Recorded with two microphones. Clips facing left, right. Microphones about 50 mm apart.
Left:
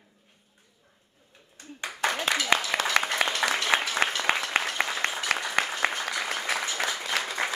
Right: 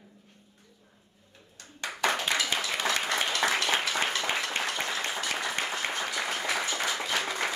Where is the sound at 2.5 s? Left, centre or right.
Left.